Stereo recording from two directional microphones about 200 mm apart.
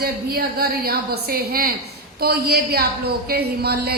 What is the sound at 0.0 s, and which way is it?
A woman's voice, 50° right (ahead or behind).